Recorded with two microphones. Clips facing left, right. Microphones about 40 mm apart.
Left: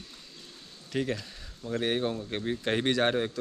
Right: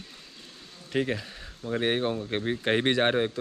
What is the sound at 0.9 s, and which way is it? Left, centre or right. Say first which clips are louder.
Speech: right 3 dB; right.